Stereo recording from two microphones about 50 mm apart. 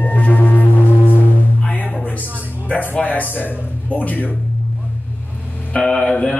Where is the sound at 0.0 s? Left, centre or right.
Left.